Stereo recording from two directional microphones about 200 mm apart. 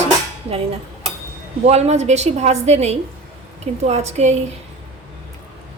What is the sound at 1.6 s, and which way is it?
A woman's voice, 35° right (ahead or behind).